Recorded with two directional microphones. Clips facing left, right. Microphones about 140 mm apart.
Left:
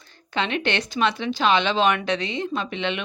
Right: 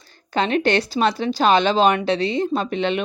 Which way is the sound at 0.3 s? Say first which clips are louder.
Right 6 dB; 40° right (ahead or behind).